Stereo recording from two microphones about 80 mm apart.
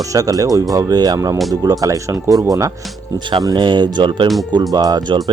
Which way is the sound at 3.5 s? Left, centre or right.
Right.